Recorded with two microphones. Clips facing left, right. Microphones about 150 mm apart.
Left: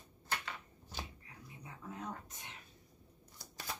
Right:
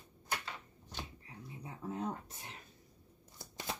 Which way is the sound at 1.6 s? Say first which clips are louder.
Right 6 dB; 30° right (ahead or behind).